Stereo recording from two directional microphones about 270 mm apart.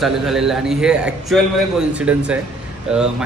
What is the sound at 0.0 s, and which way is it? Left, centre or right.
A man's voice, centre.